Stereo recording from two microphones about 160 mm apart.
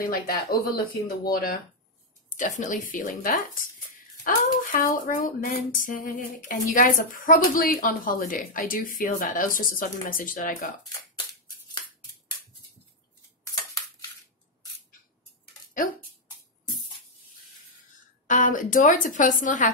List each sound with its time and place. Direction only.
0.0 s speech: 65° left (ahead or behind)
2.3 s speech: 50° left (ahead or behind)
18.2 s speech: 50° left (ahead or behind)